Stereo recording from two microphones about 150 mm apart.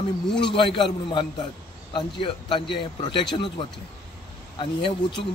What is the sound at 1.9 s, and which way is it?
A man's voice, 35° left (ahead or behind).